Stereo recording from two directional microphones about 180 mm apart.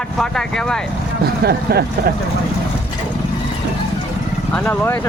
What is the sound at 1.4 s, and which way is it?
Speech, 60° right (ahead or behind).